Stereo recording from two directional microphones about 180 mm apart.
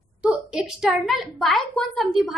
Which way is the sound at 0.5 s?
5° right (ahead or behind).